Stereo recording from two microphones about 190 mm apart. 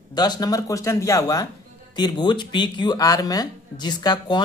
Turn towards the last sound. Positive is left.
turn(degrees=20)  # may be behind; listen again after turning